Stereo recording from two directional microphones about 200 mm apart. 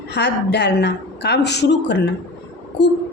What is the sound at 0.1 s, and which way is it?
A woman's voice, 55° left (ahead or behind).